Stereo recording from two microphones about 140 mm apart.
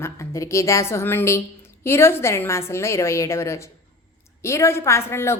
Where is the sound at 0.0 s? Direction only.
20° left (ahead or behind).